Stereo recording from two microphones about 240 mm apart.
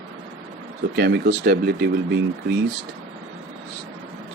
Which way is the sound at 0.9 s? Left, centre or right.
Right.